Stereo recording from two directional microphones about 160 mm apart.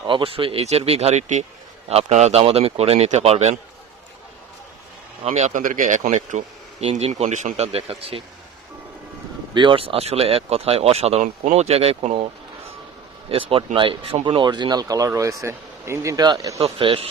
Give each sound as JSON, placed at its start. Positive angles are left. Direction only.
{"t": 0.0, "sound": "speech", "side_deg": -35}
{"t": 5.2, "sound": "speech", "side_deg": -45}
{"t": 9.6, "sound": "speech", "side_deg": -35}
{"t": 13.3, "sound": "speech", "side_deg": -35}
{"t": 16.6, "sound": "speech", "side_deg": -35}